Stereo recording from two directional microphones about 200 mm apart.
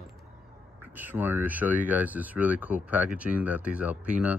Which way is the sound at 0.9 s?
10° right (ahead or behind).